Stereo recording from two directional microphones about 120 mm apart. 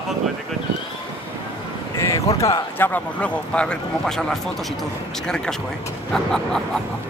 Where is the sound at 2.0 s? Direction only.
25° left (ahead or behind).